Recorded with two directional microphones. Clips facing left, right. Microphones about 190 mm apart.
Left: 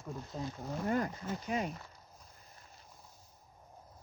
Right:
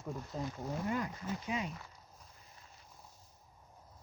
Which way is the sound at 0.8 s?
45° left (ahead or behind).